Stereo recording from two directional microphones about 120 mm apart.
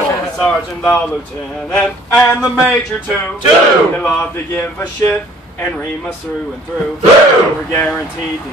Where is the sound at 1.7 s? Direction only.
10° left (ahead or behind).